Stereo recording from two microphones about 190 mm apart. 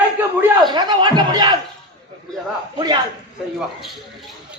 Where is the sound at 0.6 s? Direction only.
20° right (ahead or behind).